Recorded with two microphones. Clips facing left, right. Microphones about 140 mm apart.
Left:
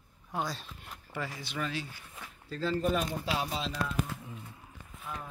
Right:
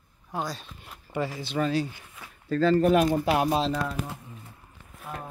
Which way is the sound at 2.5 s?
65° right (ahead or behind).